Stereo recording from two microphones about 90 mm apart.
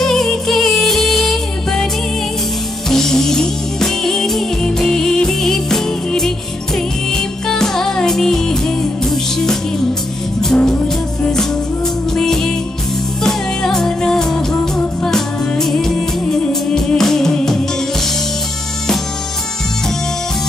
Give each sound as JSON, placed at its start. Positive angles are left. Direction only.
{"t": 0.0, "sound": "music", "side_deg": 5}
{"t": 2.9, "sound": "music", "side_deg": 5}
{"t": 12.2, "sound": "music", "side_deg": 5}